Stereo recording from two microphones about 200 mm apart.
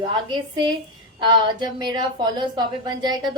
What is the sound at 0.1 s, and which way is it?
A woman's voice, 25° right (ahead or behind).